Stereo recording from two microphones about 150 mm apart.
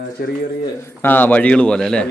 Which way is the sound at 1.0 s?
10° left (ahead or behind).